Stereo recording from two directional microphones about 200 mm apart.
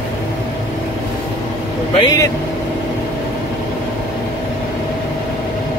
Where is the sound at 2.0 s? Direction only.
15° left (ahead or behind).